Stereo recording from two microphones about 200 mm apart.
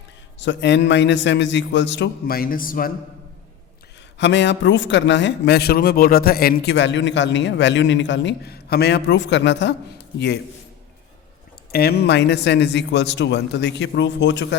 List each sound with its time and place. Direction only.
0.3 s a man's voice: 65° left (ahead or behind); by 2.9 s 45° left (ahead or behind)
4.2 s a man's voice: 60° left (ahead or behind)
11.7 s a man's voice: 50° left (ahead or behind)